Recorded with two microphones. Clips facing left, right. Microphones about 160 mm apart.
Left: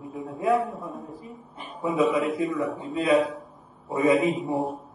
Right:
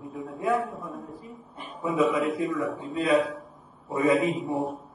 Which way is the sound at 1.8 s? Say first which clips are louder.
Left 1 dB; 30° left (ahead or behind).